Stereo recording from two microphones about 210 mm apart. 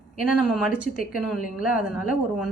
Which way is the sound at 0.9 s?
40° left (ahead or behind).